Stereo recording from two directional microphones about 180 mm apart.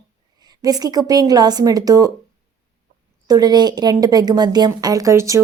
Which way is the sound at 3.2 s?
20° right (ahead or behind).